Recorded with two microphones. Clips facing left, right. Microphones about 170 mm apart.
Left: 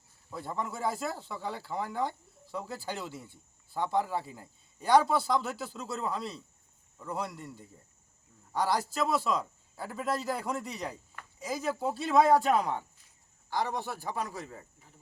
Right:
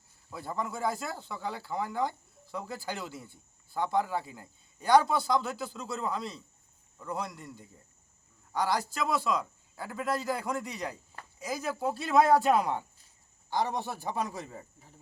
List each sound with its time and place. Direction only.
0.3 s speech: centre (ahead or behind)
13.5 s a man's voice: 20° right (ahead or behind)